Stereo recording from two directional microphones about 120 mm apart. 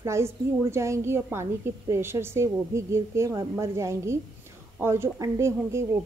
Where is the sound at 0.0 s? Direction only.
25° right (ahead or behind).